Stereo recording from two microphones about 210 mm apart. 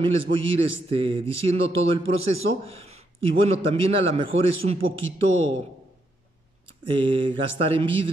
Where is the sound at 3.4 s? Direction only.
30° right (ahead or behind).